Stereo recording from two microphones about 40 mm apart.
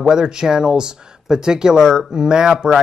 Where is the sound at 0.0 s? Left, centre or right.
Centre.